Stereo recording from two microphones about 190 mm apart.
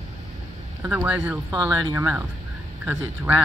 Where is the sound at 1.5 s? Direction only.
20° right (ahead or behind).